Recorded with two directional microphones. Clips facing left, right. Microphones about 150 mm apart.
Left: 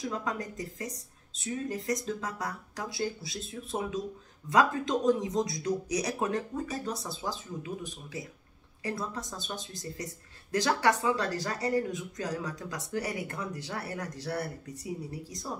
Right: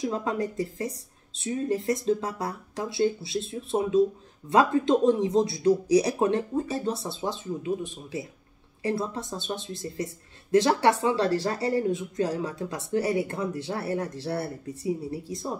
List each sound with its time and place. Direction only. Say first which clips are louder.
0.0 s speech: right 6 dB; 30° right (ahead or behind)